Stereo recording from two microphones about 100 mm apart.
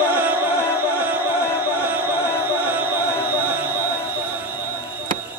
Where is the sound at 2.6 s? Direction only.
20° right (ahead or behind).